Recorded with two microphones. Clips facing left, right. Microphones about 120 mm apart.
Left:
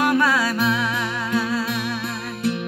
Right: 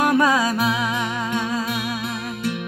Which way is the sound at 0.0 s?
15° right (ahead or behind).